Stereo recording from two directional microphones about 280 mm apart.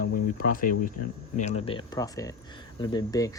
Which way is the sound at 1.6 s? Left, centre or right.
Centre.